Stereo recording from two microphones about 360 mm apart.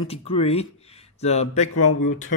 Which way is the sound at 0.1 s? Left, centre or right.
Centre.